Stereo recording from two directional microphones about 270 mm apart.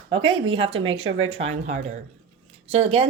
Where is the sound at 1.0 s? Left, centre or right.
Right.